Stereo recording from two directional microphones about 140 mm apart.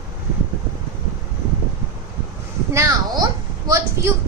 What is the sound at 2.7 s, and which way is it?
A woman's voice, 20° right (ahead or behind).